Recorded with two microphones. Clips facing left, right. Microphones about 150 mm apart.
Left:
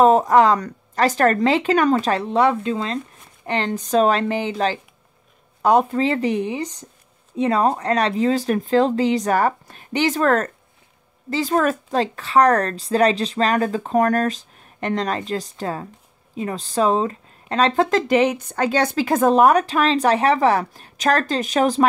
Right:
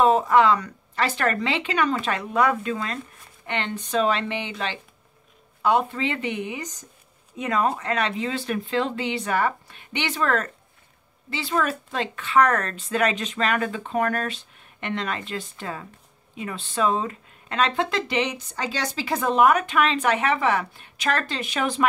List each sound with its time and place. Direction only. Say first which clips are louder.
0.0 s speech: left 4 dB; 40° left (ahead or behind)
3.4 s speech: left 6 dB; 35° left (ahead or behind)